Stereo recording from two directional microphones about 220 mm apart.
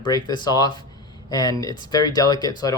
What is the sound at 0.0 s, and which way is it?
Speech, 20° left (ahead or behind).